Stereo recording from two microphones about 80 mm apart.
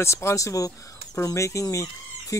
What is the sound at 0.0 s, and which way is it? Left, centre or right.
Speech, left.